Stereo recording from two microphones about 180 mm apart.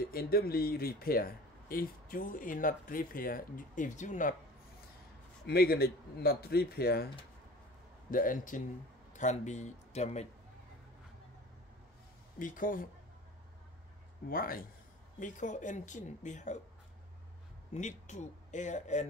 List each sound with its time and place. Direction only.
0.0 s speech: 55° left (ahead or behind)
5.5 s speech: 60° left (ahead or behind)
8.1 s a man's voice: 50° left (ahead or behind)
12.4 s speech: 50° left (ahead or behind)
14.3 s speech: 55° left (ahead or behind)
17.7 s speech: 40° left (ahead or behind)